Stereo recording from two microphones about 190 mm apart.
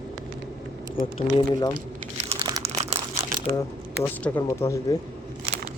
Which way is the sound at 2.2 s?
30° right (ahead or behind).